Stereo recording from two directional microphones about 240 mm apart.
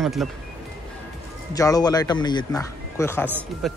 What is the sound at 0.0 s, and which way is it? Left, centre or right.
Speech, centre.